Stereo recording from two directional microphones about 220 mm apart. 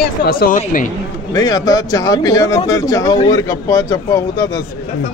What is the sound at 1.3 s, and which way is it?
A man's voice, 15° left (ahead or behind).